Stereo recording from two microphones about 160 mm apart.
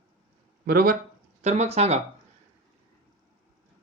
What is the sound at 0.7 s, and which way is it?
Speech, 70° right (ahead or behind).